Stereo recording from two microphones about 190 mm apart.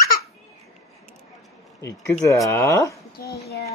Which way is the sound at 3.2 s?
55° left (ahead or behind).